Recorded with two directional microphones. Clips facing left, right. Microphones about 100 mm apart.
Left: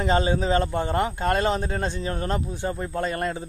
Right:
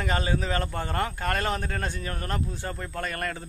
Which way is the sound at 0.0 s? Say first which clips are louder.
Left 6 dB; 25° left (ahead or behind).